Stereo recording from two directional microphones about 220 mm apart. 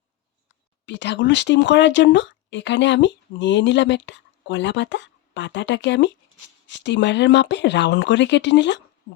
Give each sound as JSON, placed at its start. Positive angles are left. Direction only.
{"t": 0.9, "sound": "speech", "side_deg": 55}